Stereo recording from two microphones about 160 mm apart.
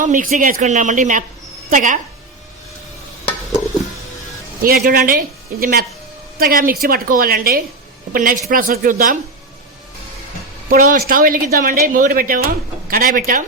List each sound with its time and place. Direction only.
0.0 s speech: 55° right (ahead or behind)
4.6 s speech: 65° right (ahead or behind)
10.7 s speech: 60° right (ahead or behind)